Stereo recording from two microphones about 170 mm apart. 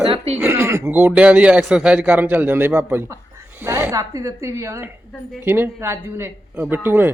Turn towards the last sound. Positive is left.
turn(degrees=-10)  # may be behind; listen again after turning